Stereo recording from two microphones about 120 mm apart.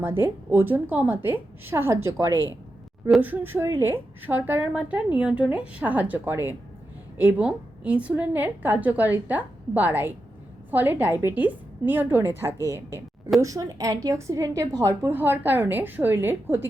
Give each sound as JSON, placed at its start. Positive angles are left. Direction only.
{"t": 0.0, "sound": "a woman's voice", "side_deg": -20}